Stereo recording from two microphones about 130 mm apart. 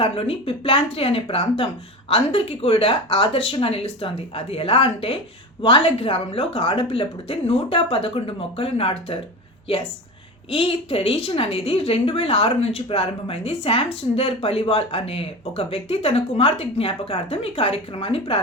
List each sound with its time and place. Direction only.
0.0 s a woman's voice: 45° left (ahead or behind)
10.5 s a woman's voice: 45° left (ahead or behind)